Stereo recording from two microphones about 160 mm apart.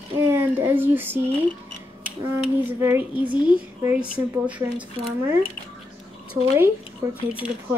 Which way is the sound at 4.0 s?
10° right (ahead or behind).